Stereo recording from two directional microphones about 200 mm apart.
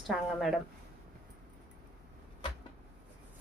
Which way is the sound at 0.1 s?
Centre (ahead or behind).